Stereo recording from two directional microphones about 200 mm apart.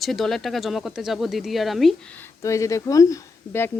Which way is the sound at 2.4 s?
15° left (ahead or behind).